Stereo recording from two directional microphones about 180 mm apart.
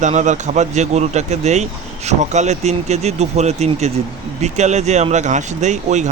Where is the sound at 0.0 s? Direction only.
40° right (ahead or behind).